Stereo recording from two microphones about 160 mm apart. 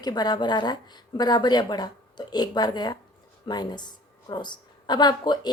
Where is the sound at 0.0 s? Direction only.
25° left (ahead or behind).